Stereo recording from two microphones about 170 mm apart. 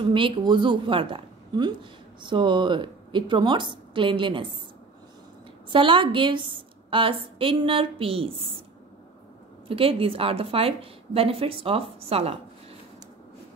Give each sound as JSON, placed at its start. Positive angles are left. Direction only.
{"t": 0.0, "sound": "a woman's voice", "side_deg": -30}
{"t": 5.7, "sound": "a woman's voice", "side_deg": -30}
{"t": 9.7, "sound": "a woman's voice", "side_deg": -35}